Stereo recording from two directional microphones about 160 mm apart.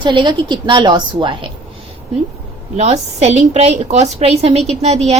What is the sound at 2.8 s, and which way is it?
A woman's voice, 45° right (ahead or behind).